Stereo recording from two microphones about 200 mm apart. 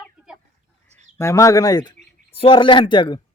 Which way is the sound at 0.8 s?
35° right (ahead or behind).